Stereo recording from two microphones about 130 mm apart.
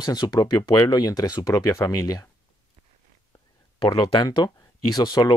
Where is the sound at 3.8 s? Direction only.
35° left (ahead or behind).